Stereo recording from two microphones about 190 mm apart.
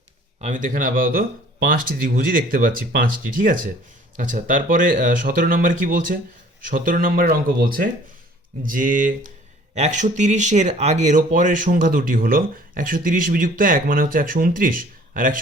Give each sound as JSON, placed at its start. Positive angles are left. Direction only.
{"t": 0.4, "sound": "speech", "side_deg": -45}